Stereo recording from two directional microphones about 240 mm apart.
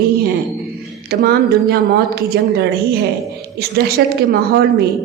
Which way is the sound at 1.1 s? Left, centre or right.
Right.